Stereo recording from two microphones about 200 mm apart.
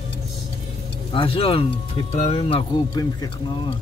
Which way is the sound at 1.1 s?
25° left (ahead or behind).